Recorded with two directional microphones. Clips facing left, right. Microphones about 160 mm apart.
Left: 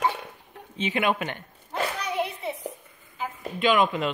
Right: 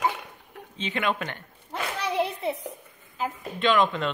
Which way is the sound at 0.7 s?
15° left (ahead or behind).